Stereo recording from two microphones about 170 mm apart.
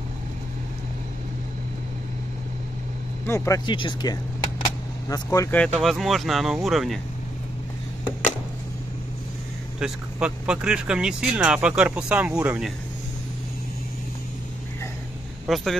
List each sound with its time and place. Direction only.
3.3 s speech: 15° left (ahead or behind)
5.6 s speech: 5° left (ahead or behind)
9.8 s speech: 5° right (ahead or behind)
15.4 s speech: centre (ahead or behind)